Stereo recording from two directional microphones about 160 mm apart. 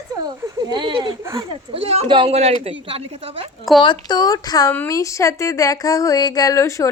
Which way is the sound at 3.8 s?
25° left (ahead or behind).